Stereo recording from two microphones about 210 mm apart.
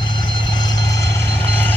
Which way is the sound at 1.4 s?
10° left (ahead or behind).